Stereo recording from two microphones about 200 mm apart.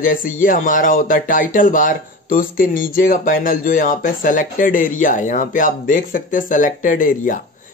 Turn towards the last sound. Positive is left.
turn(degrees=40)  # may be behind; listen again after turning